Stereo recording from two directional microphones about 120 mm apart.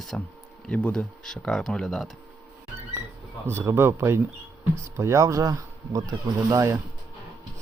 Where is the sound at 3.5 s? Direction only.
20° right (ahead or behind).